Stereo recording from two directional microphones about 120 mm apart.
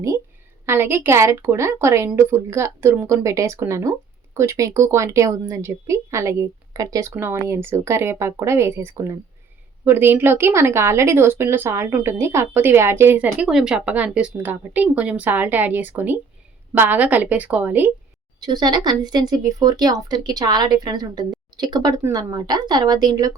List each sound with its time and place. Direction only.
0.6 s a woman's voice: 20° right (ahead or behind)
18.3 s speech: 35° right (ahead or behind)